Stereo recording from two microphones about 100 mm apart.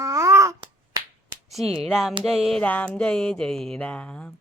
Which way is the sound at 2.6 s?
15° left (ahead or behind).